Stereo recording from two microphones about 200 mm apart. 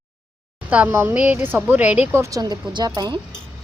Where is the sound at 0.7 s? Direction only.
10° right (ahead or behind).